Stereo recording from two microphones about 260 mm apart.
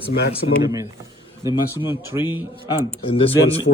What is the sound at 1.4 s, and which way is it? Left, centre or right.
Speech, centre.